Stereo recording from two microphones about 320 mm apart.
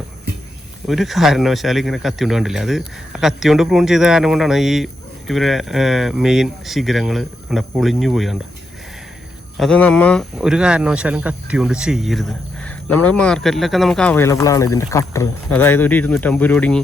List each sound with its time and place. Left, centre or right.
0.9 s speech: centre
9.6 s speech: centre